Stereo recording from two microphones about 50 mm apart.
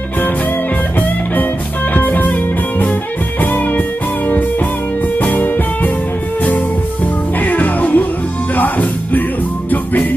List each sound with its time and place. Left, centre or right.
2.0 s music: left
7.4 s music: left